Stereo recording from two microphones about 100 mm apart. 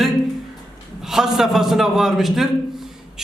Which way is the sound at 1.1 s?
5° right (ahead or behind).